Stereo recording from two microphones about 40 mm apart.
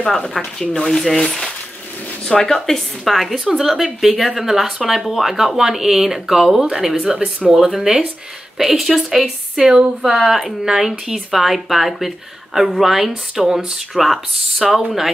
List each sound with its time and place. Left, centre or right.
0.0 s speech: centre
2.3 s speech: centre
3.1 s a woman's voice: centre